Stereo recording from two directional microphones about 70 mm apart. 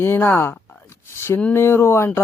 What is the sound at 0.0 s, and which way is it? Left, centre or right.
Speech, left.